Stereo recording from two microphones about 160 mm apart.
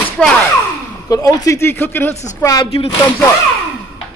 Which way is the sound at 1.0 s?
20° left (ahead or behind).